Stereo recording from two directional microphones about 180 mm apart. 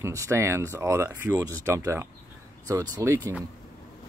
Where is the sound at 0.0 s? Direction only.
15° right (ahead or behind).